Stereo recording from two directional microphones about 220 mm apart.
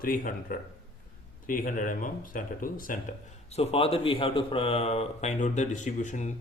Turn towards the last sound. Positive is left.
turn(degrees=35)  # may be behind; listen again after turning